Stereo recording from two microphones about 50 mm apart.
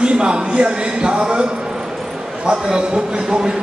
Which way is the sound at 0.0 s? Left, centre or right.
Centre.